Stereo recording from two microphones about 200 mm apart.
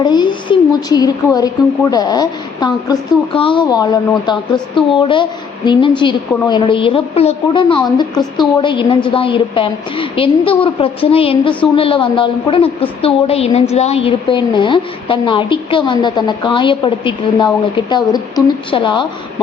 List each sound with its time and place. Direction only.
0.0 s a woman's voice: 20° left (ahead or behind)